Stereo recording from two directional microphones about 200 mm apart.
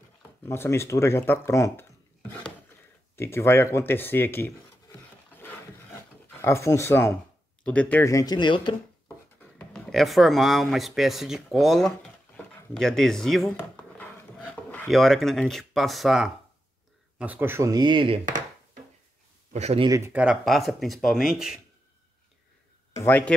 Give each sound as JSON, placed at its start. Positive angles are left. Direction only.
{"t": 0.5, "sound": "speech", "side_deg": 15}
{"t": 6.4, "sound": "speech", "side_deg": 15}
{"t": 9.4, "sound": "speech", "side_deg": 5}
{"t": 19.5, "sound": "speech", "side_deg": -30}
{"t": 19.9, "sound": "speech", "side_deg": -10}
{"t": 22.9, "sound": "speech", "side_deg": 10}